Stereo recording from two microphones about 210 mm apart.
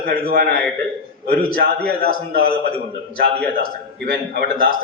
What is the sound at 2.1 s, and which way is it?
Speech, 45° right (ahead or behind).